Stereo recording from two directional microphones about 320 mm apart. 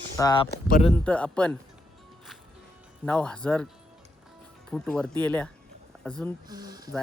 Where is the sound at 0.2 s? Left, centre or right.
Centre.